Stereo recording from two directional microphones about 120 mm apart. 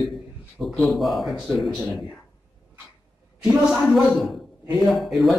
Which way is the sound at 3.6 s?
5° right (ahead or behind).